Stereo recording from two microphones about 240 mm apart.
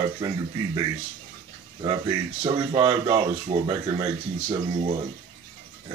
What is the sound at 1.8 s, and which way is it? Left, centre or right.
Speech, centre.